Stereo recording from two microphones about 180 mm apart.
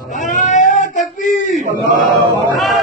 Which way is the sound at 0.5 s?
45° left (ahead or behind).